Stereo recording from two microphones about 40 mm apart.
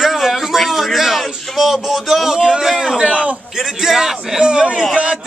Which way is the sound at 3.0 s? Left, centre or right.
Right.